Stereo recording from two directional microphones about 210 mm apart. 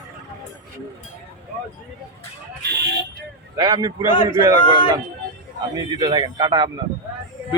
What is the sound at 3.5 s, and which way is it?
Speech, 20° right (ahead or behind).